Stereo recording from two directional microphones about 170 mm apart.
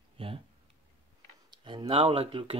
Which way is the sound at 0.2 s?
30° right (ahead or behind).